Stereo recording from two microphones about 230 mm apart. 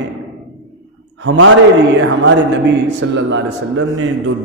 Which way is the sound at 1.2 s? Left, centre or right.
Right.